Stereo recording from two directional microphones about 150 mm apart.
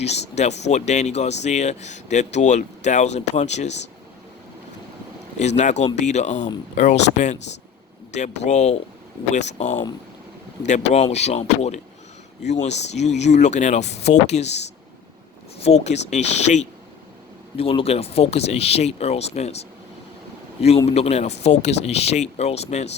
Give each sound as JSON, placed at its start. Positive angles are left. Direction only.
{"t": 0.0, "sound": "speech", "side_deg": 45}
{"t": 5.4, "sound": "speech", "side_deg": 50}
{"t": 20.6, "sound": "speech", "side_deg": 45}